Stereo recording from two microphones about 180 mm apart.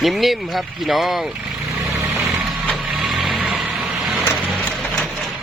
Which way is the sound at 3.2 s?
Centre (ahead or behind).